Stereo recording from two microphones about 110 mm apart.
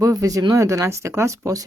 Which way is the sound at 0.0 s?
30° right (ahead or behind).